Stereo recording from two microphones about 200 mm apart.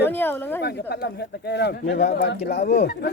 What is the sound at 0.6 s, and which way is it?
Speech, 55° left (ahead or behind).